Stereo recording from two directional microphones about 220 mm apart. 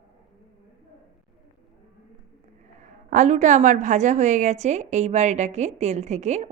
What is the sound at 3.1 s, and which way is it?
A woman's voice, 35° right (ahead or behind).